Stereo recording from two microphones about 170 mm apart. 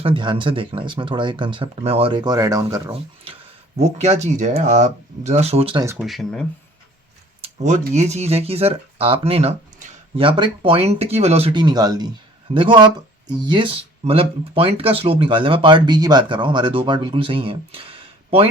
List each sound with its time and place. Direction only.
0.0 s speech: 30° right (ahead or behind)
2.9 s speech: 35° right (ahead or behind)
6.0 s speech: centre (ahead or behind)
7.4 s speech: 40° right (ahead or behind)